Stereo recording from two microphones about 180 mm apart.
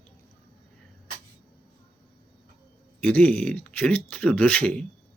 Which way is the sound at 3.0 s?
5° left (ahead or behind).